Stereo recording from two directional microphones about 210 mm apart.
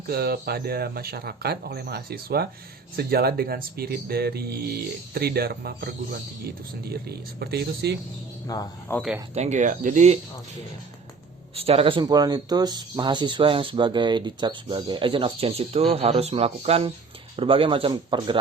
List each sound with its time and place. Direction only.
0.1 s speech: 45° right (ahead or behind)
8.4 s speech: 15° left (ahead or behind)
9.0 s speech: 5° right (ahead or behind)
9.3 s speech: 35° right (ahead or behind)
11.5 s speech: 30° right (ahead or behind)